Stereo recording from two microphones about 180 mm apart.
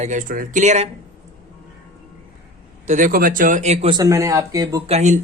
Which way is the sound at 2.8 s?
45° right (ahead or behind).